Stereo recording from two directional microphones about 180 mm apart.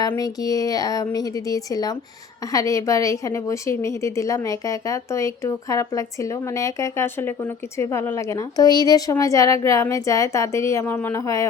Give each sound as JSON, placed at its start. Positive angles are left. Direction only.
{"t": 0.0, "sound": "a woman's voice", "side_deg": 20}